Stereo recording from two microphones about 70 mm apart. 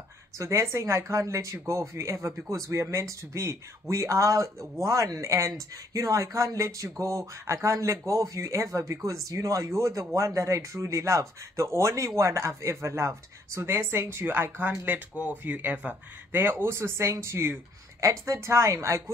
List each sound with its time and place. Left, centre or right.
0.4 s speech: right
14.7 s speech: centre; by 17.6 s right
18.0 s speech: right